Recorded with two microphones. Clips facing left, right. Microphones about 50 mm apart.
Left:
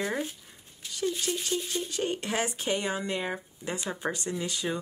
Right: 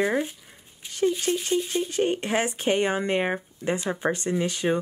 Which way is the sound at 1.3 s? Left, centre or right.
Right.